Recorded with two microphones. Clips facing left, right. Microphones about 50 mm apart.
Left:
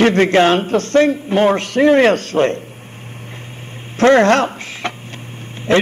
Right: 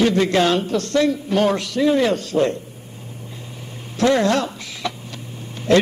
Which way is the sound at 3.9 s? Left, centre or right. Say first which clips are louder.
Left 6 dB; left.